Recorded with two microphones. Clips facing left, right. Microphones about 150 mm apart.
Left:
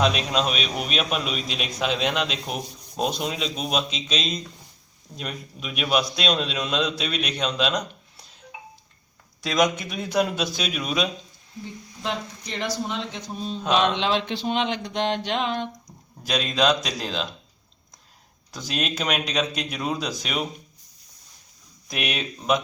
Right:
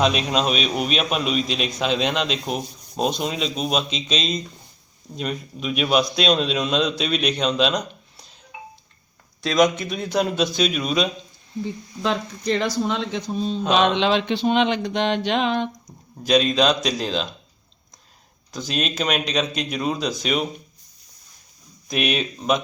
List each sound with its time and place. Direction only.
0.0 s a man's voice: centre (ahead or behind)
9.4 s speech: 10° left (ahead or behind)
12.0 s speech: 90° right
16.2 s a man's voice: 5° left (ahead or behind)
18.5 s speech: 5° left (ahead or behind)
21.8 s a man's voice: 5° left (ahead or behind)